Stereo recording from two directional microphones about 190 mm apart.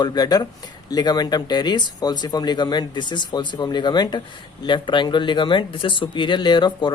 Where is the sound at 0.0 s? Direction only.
20° left (ahead or behind).